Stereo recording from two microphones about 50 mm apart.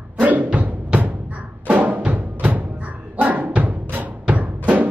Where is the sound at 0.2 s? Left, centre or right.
Right.